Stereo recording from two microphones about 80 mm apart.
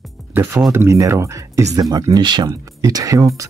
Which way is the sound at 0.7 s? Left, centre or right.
Right.